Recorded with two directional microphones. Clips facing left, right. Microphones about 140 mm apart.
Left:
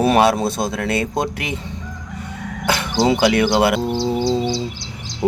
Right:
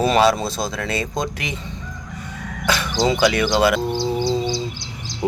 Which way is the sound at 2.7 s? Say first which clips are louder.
Left 2 dB; 60° left (ahead or behind).